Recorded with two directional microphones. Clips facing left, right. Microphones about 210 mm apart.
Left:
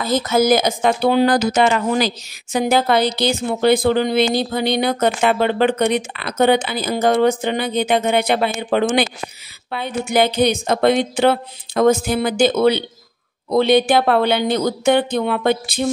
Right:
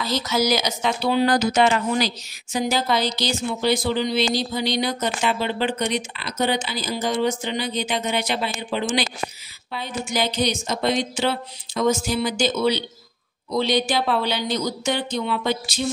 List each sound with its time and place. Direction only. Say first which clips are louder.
0.0 s a woman's voice: left 6 dB; 50° left (ahead or behind)